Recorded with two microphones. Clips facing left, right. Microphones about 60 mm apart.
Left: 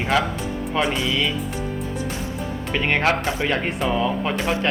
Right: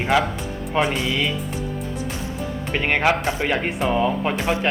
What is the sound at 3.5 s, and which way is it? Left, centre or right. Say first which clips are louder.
Speech: right 1 dB; centre.